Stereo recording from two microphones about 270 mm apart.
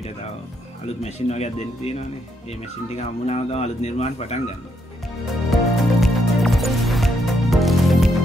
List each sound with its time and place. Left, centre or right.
1.0 s a man's voice: left
5.5 s music: centre